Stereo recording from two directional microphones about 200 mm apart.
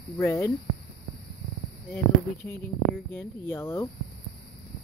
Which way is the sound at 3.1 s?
10° left (ahead or behind).